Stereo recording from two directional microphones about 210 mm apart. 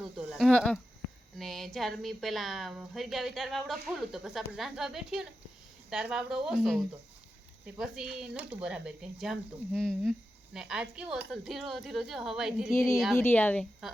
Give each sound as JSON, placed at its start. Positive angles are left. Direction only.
{"t": 0.2, "sound": "speech", "side_deg": 0}
{"t": 12.7, "sound": "speech", "side_deg": 15}